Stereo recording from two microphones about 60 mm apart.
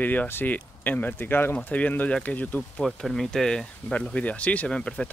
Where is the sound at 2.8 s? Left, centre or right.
Centre.